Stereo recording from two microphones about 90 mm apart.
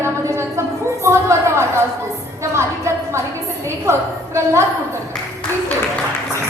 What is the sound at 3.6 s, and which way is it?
A woman's voice, 30° right (ahead or behind).